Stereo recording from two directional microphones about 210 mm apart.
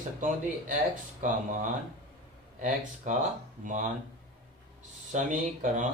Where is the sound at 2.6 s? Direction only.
40° right (ahead or behind).